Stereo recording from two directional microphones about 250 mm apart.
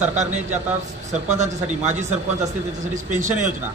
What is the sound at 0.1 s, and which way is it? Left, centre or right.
Speech, right.